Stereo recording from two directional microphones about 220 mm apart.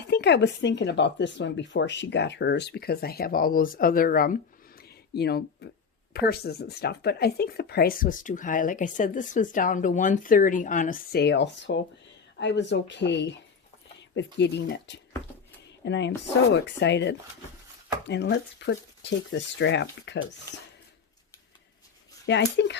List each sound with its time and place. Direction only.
0.1 s speech: 50° left (ahead or behind)
4.8 s a sound: 45° left (ahead or behind)
6.1 s speech: 45° left (ahead or behind)
22.3 s speech: 55° left (ahead or behind)